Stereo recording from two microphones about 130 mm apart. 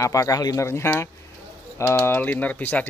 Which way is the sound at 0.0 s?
25° left (ahead or behind).